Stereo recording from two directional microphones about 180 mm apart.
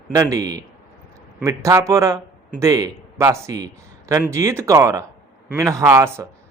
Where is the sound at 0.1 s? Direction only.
15° right (ahead or behind).